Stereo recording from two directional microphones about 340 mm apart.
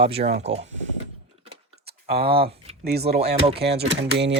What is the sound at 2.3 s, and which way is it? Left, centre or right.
Speech, right.